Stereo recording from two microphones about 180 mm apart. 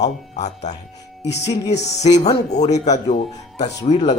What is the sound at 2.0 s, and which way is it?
Speech, 40° left (ahead or behind).